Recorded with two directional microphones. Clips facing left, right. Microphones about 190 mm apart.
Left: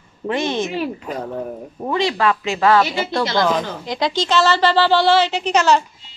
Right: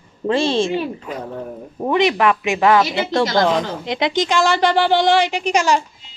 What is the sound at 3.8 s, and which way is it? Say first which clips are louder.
A woman's voice: right 1 dB; 20° right (ahead or behind).